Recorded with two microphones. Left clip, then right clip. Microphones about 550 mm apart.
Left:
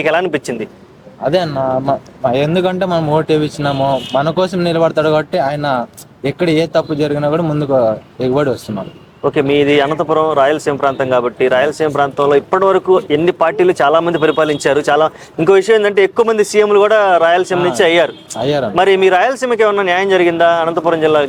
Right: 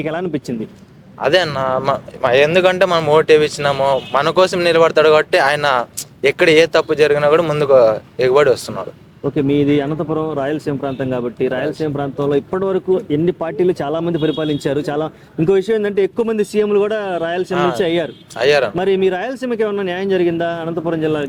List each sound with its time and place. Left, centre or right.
0.0 s speech: left
1.2 s a man's voice: right
9.2 s speech: left
9.9 s a man's voice: centre
10.3 s speech: left
18.3 s a man's voice: right
18.8 s speech: left